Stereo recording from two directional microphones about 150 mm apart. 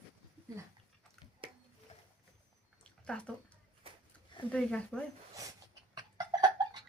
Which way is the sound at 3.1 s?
5° left (ahead or behind).